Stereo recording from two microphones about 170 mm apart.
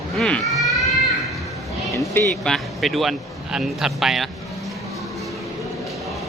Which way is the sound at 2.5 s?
Centre (ahead or behind).